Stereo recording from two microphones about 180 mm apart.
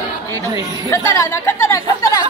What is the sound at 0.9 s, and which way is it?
A woman's voice, 15° left (ahead or behind).